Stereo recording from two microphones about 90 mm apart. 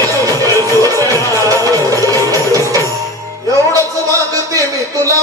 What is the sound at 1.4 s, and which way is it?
Music, 40° right (ahead or behind).